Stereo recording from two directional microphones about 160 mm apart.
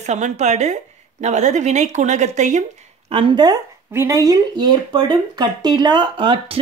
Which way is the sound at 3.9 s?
15° right (ahead or behind).